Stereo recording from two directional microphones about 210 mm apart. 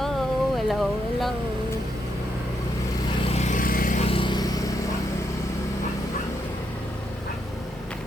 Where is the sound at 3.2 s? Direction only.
30° left (ahead or behind).